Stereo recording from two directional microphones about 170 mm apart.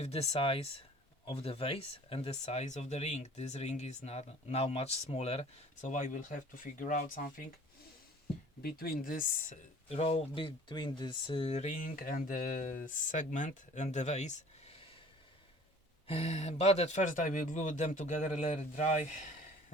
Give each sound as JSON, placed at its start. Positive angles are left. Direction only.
{"t": 0.0, "sound": "speech", "side_deg": 40}
{"t": 8.6, "sound": "speech", "side_deg": 60}
{"t": 9.9, "sound": "speech", "side_deg": 35}
{"t": 16.0, "sound": "speech", "side_deg": 40}